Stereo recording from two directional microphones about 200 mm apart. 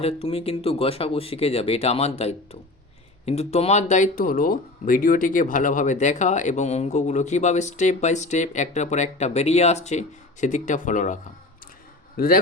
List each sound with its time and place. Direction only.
0.0 s a man's voice: 30° left (ahead or behind); by 12.4 s 45° left (ahead or behind)